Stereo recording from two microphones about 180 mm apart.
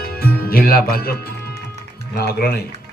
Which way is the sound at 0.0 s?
55° left (ahead or behind).